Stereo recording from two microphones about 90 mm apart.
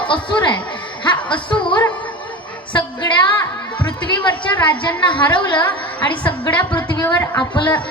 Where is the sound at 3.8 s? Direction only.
60° left (ahead or behind).